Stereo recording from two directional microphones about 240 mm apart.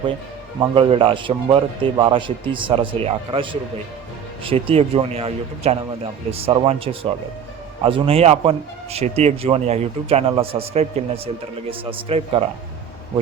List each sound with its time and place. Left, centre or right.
0.6 s speech: right